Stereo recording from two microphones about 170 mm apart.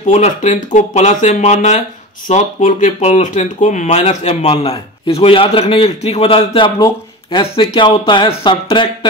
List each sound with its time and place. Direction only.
0.0 s speech: 45° left (ahead or behind)